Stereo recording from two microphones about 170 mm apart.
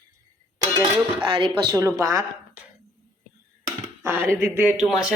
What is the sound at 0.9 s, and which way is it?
Speech, 25° right (ahead or behind).